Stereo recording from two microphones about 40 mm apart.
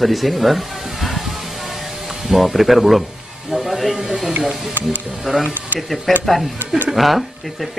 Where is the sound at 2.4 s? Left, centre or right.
Centre.